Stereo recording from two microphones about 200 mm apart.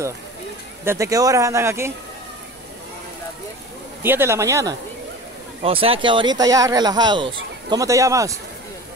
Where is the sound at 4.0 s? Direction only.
10° right (ahead or behind).